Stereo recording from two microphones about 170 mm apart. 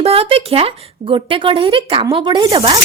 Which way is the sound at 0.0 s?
35° right (ahead or behind).